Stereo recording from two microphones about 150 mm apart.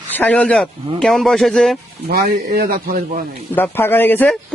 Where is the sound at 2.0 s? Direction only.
90° right.